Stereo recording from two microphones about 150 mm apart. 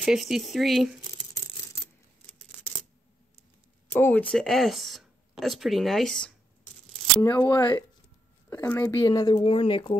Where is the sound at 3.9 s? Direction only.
15° left (ahead or behind).